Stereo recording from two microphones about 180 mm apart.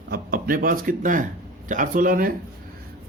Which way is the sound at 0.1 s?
55° right (ahead or behind).